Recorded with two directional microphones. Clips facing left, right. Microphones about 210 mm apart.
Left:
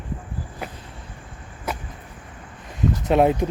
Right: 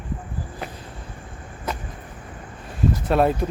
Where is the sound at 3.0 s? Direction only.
15° left (ahead or behind).